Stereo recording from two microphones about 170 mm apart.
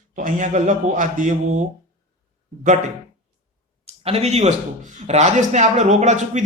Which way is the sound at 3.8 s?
40° right (ahead or behind).